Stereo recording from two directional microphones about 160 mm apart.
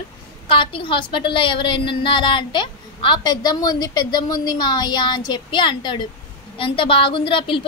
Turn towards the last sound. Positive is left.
turn(degrees=30)  # may be behind; listen again after turning